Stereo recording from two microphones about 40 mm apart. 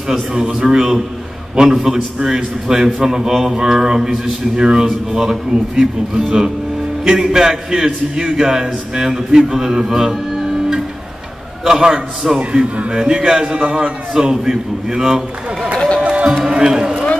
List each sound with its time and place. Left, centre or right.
0.3 s a man's voice: centre
12.4 s speech: right
12.9 s a man's voice: centre
14.1 s a man's voice: centre
16.1 s music: right
16.4 s run: centre